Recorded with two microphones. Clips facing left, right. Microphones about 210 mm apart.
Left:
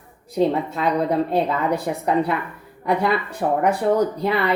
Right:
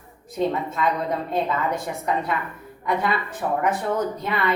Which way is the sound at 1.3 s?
35° left (ahead or behind).